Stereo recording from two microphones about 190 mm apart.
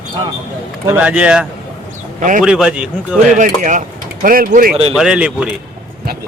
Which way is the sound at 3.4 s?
40° right (ahead or behind).